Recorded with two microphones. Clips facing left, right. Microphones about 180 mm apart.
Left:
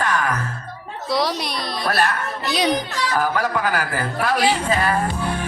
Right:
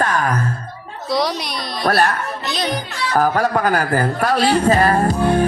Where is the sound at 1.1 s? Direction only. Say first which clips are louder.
Right 2 dB; centre (ahead or behind).